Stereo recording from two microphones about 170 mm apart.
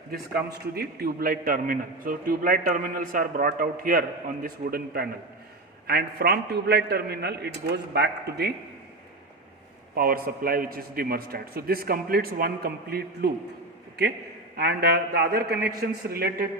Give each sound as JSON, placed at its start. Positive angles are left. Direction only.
{"t": 0.1, "sound": "a man's voice", "side_deg": -65}
{"t": 9.9, "sound": "a man's voice", "side_deg": -60}
{"t": 14.5, "sound": "a man's voice", "side_deg": -65}